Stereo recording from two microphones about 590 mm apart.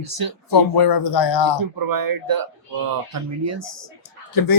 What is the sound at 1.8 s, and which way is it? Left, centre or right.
Speech, right.